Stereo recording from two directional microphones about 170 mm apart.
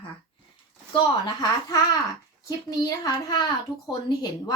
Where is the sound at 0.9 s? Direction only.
25° left (ahead or behind).